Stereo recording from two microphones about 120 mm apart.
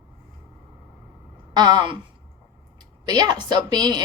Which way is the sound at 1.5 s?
40° right (ahead or behind).